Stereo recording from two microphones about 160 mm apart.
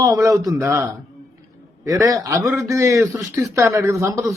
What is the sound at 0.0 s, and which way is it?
A man's voice, 20° right (ahead or behind).